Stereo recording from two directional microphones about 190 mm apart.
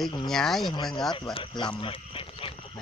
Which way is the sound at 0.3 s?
Centre (ahead or behind).